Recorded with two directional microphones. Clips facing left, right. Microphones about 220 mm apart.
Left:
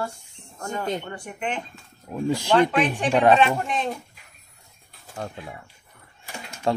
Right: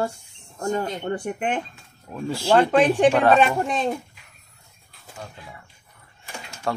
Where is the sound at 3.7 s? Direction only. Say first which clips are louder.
Right 3 dB; 30° right (ahead or behind).